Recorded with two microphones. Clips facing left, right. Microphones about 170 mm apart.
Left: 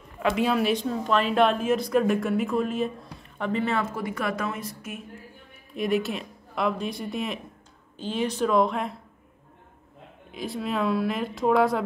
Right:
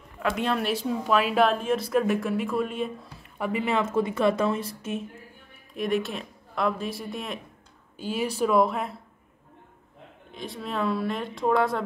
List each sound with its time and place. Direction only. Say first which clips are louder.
0.2 s speech: left 3 dB; 5° left (ahead or behind); by 3.8 s 10° right (ahead or behind)
3.9 s a woman's voice: right 6 dB; 25° right (ahead or behind)
5.8 s speech: left 1 dB; centre (ahead or behind)
10.3 s speech: left 3 dB; centre (ahead or behind)